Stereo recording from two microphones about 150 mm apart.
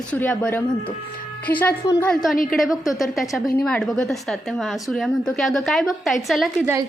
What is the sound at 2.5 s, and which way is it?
A woman's voice, centre (ahead or behind).